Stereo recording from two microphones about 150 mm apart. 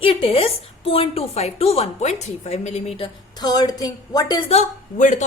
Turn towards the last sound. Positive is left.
turn(degrees=55)  # may be behind; listen again after turning